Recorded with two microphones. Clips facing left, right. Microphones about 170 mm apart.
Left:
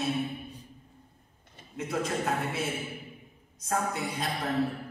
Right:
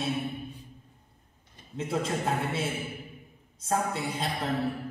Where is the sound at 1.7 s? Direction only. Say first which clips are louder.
Right 1 dB; 30° right (ahead or behind).